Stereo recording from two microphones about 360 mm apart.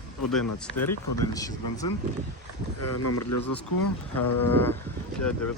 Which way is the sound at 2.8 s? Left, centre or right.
Left.